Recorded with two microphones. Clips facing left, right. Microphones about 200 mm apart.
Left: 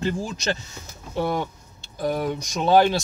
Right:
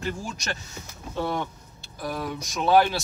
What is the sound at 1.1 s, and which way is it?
Speech, 10° left (ahead or behind).